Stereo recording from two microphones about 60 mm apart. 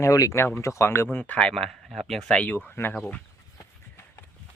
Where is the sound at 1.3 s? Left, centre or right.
Centre.